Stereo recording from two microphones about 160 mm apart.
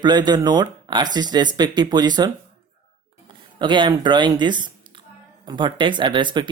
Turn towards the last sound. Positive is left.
turn(degrees=-30)  # may be behind; listen again after turning